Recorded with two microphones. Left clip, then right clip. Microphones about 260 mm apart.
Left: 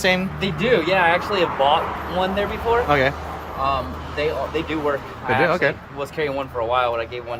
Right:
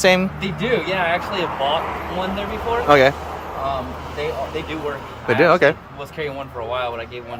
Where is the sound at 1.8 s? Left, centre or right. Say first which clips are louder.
Even; right.